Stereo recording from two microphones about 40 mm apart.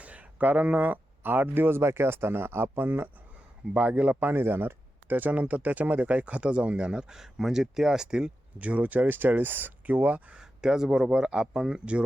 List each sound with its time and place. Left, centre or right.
0.0 s speech: right
3.8 s speech: right
4.1 s speech: right
7.2 s speech: centre
8.5 s speech: right
10.3 s speech: centre